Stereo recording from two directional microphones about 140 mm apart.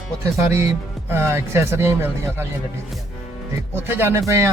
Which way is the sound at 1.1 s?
15° right (ahead or behind).